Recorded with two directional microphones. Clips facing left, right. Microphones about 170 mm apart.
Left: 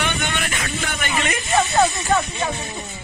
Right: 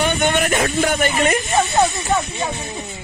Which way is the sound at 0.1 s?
45° right (ahead or behind).